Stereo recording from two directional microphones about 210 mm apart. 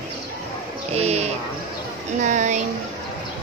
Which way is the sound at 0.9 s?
30° right (ahead or behind).